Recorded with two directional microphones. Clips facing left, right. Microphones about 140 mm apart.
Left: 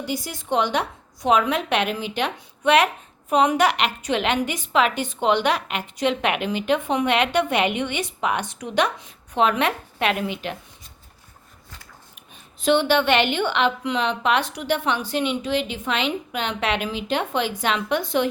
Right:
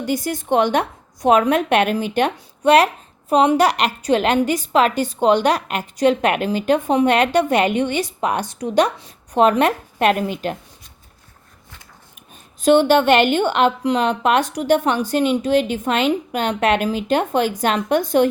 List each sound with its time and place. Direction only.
0.0 s a woman's voice: 50° right (ahead or behind)
12.6 s a woman's voice: 45° right (ahead or behind)